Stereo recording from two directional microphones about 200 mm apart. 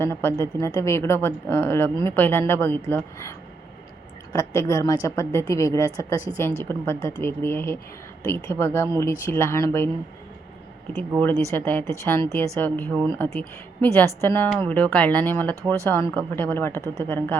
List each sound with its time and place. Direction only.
0.0 s a woman's voice: 10° left (ahead or behind)
11.2 s a woman's voice: 10° left (ahead or behind)